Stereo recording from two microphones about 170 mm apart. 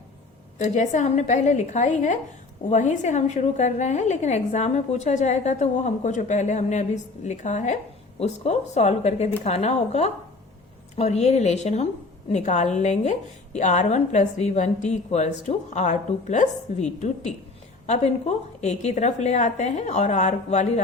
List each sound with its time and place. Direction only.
0.6 s a woman's voice: 45° left (ahead or behind)